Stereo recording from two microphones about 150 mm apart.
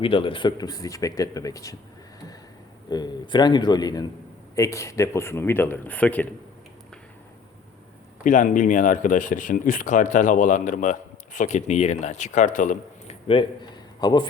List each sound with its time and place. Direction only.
0.0 s speech: 35° left (ahead or behind)
2.9 s speech: 30° left (ahead or behind); by 6.2 s 10° left (ahead or behind)
8.2 s speech: 55° left (ahead or behind)
13.2 s a man's voice: 35° left (ahead or behind)